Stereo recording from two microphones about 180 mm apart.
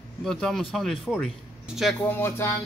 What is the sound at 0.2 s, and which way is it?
Speech, centre (ahead or behind).